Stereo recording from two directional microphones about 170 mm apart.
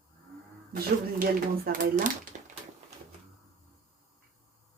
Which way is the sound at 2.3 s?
50° right (ahead or behind).